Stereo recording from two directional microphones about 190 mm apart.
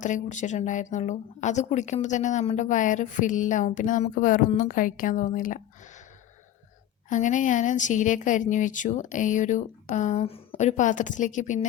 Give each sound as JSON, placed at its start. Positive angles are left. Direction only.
{"t": 0.0, "sound": "speech", "side_deg": 40}
{"t": 7.1, "sound": "speech", "side_deg": 40}